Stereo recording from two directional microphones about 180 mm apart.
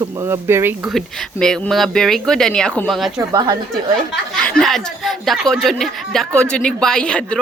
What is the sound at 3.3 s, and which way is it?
Speech, 20° right (ahead or behind).